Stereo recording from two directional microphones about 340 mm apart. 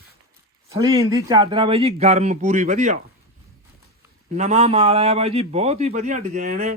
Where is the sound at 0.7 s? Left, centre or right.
Centre.